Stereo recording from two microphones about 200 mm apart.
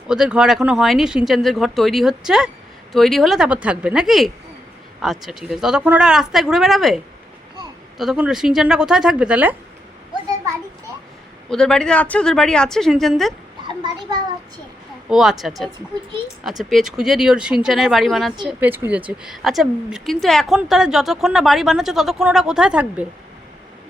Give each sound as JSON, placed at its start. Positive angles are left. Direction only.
{"t": 0.1, "sound": "a woman's voice", "side_deg": -5}
{"t": 11.4, "sound": "a woman's voice", "side_deg": 5}
{"t": 13.7, "sound": "a child's voice", "side_deg": -20}
{"t": 15.1, "sound": "a woman's voice", "side_deg": 0}